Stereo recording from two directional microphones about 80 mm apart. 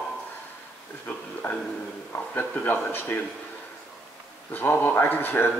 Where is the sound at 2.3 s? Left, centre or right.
Left.